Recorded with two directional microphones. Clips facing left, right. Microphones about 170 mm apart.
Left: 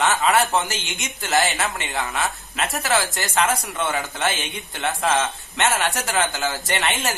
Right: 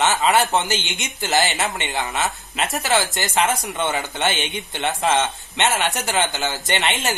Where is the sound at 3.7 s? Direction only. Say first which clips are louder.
Right 1 dB; 25° right (ahead or behind).